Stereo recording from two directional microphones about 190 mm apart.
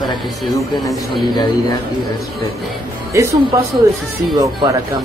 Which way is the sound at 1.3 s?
25° left (ahead or behind).